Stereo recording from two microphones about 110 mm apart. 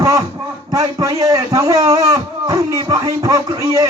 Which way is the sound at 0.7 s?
35° right (ahead or behind).